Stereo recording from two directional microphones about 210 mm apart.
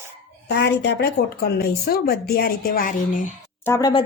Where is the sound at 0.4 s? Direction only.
50° left (ahead or behind).